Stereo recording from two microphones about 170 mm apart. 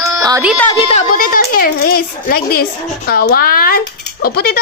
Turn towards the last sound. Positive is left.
turn(degrees=65)  # may be behind; listen again after turning